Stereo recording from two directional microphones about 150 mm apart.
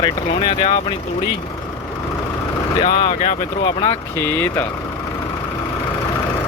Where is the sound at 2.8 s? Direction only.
35° left (ahead or behind).